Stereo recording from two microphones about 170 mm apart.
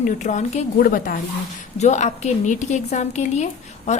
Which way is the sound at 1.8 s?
45° left (ahead or behind).